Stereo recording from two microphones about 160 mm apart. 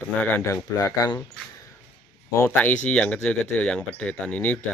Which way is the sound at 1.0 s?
25° left (ahead or behind).